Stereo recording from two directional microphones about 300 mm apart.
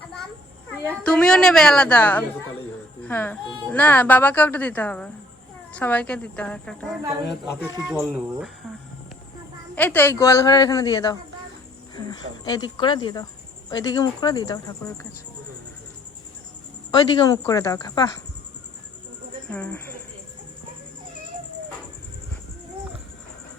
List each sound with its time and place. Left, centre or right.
1.0 s a woman's voice: centre
9.7 s speech: centre
16.9 s speech: centre
19.5 s speech: centre